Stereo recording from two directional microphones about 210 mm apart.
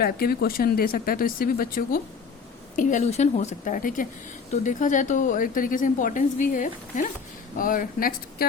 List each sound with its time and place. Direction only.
0.0 s a woman's voice: 45° left (ahead or behind)